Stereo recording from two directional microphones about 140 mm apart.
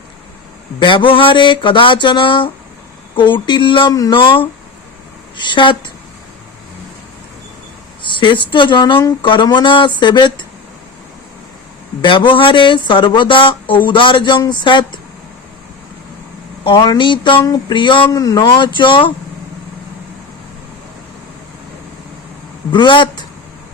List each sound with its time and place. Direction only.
0.8 s speech: 35° left (ahead or behind)
8.0 s speech: 35° left (ahead or behind)
12.0 s speech: 35° left (ahead or behind)
16.6 s speech: 30° left (ahead or behind)
22.7 s speech: 35° left (ahead or behind)